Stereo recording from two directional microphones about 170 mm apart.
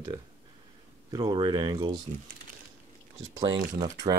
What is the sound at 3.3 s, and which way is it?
Speech, 25° right (ahead or behind).